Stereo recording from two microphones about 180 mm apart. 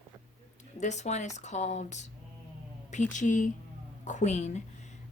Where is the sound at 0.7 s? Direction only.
40° left (ahead or behind).